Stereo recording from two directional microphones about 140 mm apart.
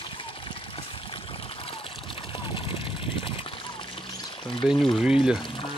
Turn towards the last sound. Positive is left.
turn(degrees=-5)  # may be behind; listen again after turning